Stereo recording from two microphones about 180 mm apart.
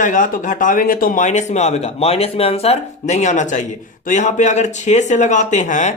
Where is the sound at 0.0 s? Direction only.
45° left (ahead or behind).